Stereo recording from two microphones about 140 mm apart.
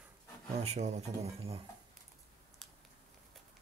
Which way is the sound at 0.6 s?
55° right (ahead or behind).